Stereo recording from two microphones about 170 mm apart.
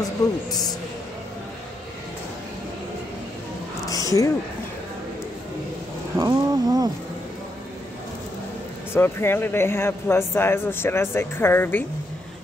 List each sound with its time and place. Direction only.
0.2 s speech: 20° left (ahead or behind)
3.8 s a sound: 20° left (ahead or behind)
6.1 s speech: 20° right (ahead or behind)
8.9 s speech: 15° left (ahead or behind)